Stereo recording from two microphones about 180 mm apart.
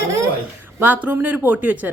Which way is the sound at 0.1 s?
15° right (ahead or behind).